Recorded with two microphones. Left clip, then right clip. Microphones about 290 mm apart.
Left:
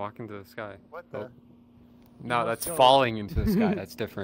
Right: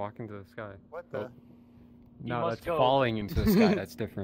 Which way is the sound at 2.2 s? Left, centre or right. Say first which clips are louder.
Left 5 dB; left.